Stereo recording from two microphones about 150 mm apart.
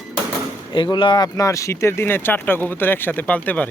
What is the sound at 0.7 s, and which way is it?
Speech, 30° left (ahead or behind).